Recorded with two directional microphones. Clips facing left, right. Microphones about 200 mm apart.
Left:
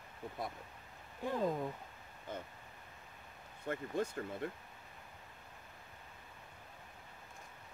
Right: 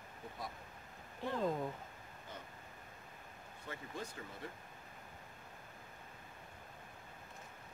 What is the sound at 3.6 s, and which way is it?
Speech, 55° left (ahead or behind).